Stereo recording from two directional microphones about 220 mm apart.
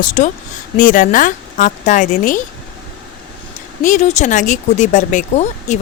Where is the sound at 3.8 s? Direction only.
35° left (ahead or behind).